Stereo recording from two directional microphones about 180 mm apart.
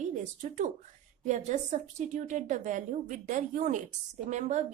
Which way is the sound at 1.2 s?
40° right (ahead or behind).